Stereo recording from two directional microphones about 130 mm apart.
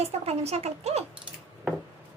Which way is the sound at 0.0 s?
55° right (ahead or behind).